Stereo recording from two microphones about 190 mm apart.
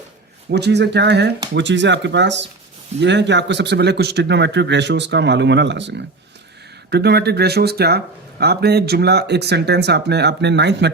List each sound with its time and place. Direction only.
0.5 s speech: 65° right (ahead or behind)